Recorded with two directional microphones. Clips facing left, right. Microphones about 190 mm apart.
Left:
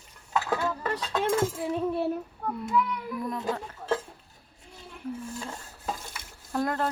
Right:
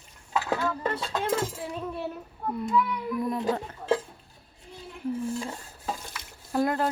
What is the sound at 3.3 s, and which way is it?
Speech, 15° right (ahead or behind).